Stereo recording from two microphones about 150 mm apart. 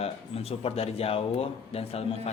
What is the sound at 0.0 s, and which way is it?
Speech, 40° left (ahead or behind).